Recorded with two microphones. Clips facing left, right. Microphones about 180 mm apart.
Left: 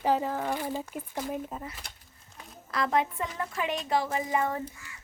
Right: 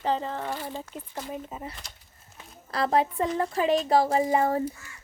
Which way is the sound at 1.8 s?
55° left (ahead or behind).